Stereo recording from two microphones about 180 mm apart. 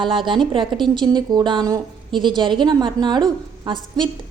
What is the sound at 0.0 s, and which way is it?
A woman's voice, 25° right (ahead or behind).